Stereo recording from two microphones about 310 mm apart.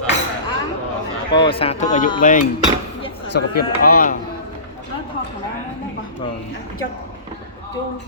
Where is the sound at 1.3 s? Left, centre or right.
Centre.